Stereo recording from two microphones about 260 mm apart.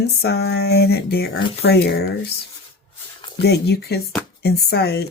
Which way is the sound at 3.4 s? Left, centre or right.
Left.